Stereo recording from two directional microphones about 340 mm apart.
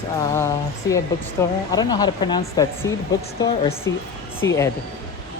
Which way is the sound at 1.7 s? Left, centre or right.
Centre.